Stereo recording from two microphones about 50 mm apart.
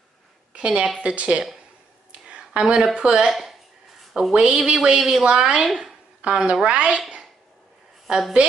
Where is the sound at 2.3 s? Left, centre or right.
Right.